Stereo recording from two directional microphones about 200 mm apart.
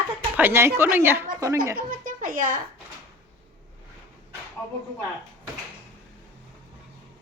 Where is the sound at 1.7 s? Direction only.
45° right (ahead or behind).